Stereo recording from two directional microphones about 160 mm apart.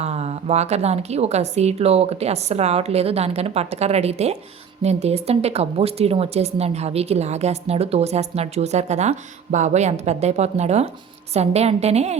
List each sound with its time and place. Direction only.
0.0 s a woman's voice: 40° right (ahead or behind)